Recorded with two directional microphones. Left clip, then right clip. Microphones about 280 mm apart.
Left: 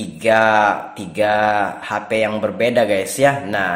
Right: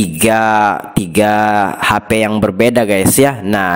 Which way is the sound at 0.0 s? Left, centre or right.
Right.